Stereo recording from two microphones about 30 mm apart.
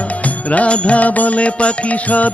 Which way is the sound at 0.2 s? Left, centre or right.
Left.